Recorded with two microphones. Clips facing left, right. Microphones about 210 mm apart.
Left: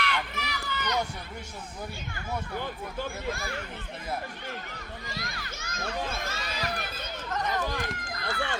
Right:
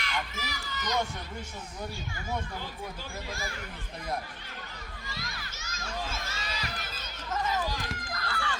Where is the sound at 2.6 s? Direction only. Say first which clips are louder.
Left 6 dB; 55° left (ahead or behind).